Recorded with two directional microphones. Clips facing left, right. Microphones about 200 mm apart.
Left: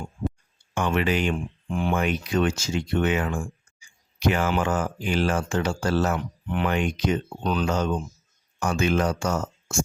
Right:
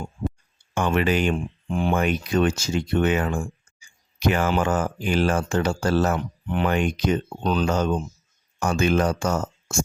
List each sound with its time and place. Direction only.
0.7 s speech: 45° right (ahead or behind)
1.7 s speech: 35° right (ahead or behind)
4.2 s speech: 45° right (ahead or behind)